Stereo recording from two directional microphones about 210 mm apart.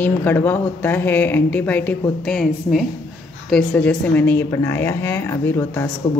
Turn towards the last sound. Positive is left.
turn(degrees=15)  # may be behind; listen again after turning